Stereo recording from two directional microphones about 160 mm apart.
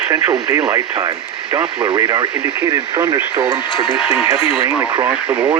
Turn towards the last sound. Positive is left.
turn(degrees=-10)  # may be behind; listen again after turning